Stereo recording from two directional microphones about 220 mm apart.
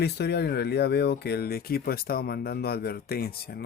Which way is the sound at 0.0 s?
50° left (ahead or behind).